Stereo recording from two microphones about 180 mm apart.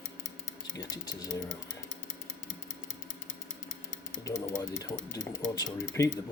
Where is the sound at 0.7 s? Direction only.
20° left (ahead or behind).